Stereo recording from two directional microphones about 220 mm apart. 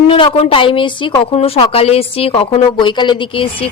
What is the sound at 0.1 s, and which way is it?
A woman's voice, 25° left (ahead or behind).